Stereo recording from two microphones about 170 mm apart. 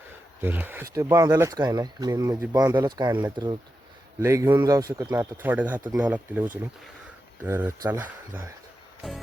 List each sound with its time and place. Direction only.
0.4 s speech: 10° right (ahead or behind)